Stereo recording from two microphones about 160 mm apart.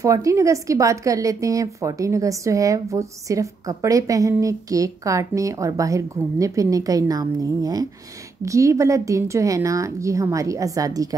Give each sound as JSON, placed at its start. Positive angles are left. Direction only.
{"t": 0.0, "sound": "a woman's voice", "side_deg": -20}